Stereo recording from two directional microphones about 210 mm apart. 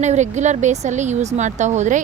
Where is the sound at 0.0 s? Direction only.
35° right (ahead or behind).